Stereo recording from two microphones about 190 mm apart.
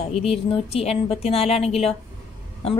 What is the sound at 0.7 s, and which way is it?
Speech, 35° left (ahead or behind).